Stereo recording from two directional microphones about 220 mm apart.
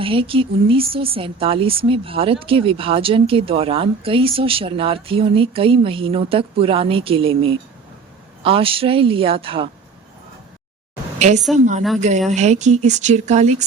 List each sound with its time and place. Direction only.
0.0 s speech: 25° right (ahead or behind)
11.2 s speech: 30° right (ahead or behind)